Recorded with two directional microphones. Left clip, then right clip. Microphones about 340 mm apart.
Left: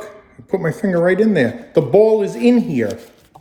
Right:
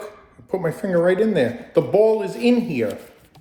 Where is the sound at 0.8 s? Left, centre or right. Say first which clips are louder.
Left 3 dB; left.